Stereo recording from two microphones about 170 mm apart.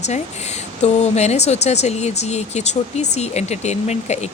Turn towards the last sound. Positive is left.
turn(degrees=40)  # may be behind; listen again after turning